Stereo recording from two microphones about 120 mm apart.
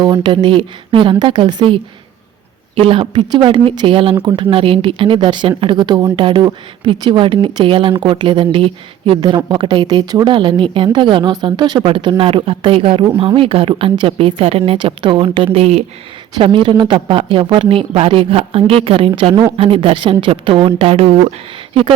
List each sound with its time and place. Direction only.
0.0 s a woman's voice: 40° right (ahead or behind)
11.9 s speech: 45° right (ahead or behind)
15.5 s speech: 60° right (ahead or behind)
16.4 s speech: 45° right (ahead or behind)